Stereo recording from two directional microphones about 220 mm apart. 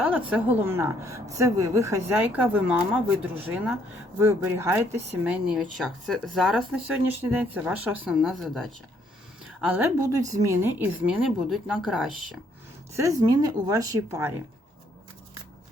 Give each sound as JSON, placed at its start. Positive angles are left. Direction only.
{"t": 0.0, "sound": "a woman's voice", "side_deg": -5}
{"t": 13.0, "sound": "a woman's voice", "side_deg": -15}